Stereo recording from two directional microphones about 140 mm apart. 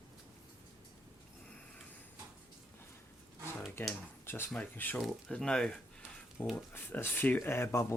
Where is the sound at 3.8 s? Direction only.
15° left (ahead or behind).